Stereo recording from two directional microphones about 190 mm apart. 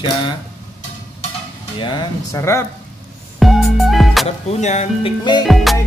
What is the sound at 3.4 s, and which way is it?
Music, centre (ahead or behind).